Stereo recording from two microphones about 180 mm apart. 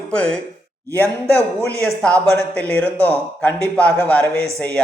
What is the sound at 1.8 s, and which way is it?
A woman's voice, 5° left (ahead or behind).